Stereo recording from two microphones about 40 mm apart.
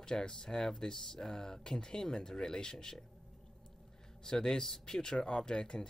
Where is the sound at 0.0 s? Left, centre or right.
Centre.